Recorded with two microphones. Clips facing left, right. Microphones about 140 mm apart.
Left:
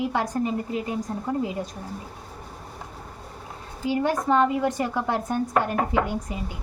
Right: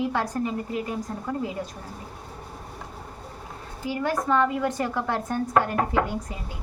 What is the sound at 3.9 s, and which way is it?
A woman's voice, 20° left (ahead or behind).